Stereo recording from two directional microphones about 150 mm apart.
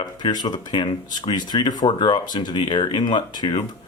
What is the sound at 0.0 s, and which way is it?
Speech, 25° left (ahead or behind).